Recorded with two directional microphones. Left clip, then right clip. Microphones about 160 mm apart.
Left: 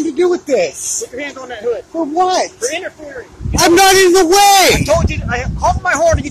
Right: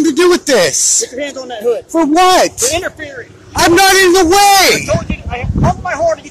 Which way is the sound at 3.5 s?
20° right (ahead or behind).